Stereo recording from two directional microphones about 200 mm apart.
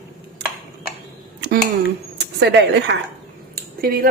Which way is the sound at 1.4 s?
50° right (ahead or behind).